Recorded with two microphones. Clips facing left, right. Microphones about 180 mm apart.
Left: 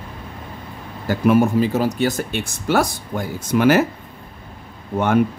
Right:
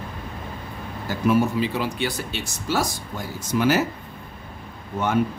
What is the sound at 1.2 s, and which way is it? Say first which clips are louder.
Speech: left 5 dB; 55° left (ahead or behind).